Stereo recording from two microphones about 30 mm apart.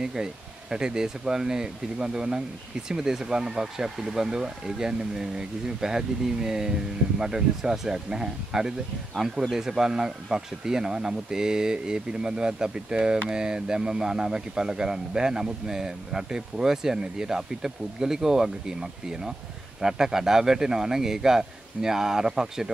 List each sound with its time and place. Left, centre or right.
0.0 s speech: centre
9.2 s a man's voice: centre